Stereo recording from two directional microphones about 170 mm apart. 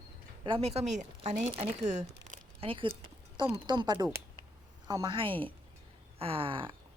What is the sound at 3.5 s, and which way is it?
A woman's voice, 25° right (ahead or behind).